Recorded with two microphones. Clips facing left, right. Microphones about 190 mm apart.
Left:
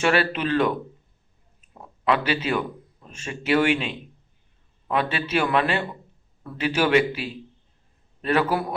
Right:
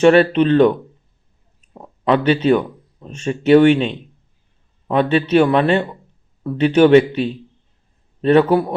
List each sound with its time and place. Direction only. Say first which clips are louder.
0.0 s a man's voice: right 11 dB; 30° right (ahead or behind)
1.7 s a man's voice: right 6 dB; 30° right (ahead or behind)
8.2 s a man's voice: right 10 dB; 30° right (ahead or behind)